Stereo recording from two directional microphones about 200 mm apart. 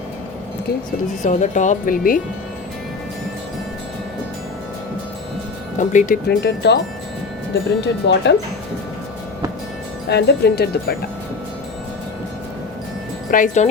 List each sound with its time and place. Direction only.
1.2 s speech: 35° left (ahead or behind)
5.7 s speech: 40° left (ahead or behind)
6.2 s speech: 55° left (ahead or behind)
7.8 s speech: 60° left (ahead or behind)
10.1 s speech: 55° left (ahead or behind)
13.3 s speech: 40° left (ahead or behind)